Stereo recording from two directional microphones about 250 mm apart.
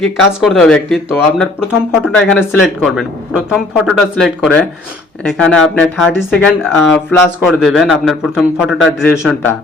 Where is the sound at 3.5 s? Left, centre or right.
Centre.